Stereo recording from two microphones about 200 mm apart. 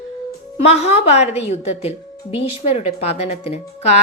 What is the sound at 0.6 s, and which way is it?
A woman's voice, 30° left (ahead or behind).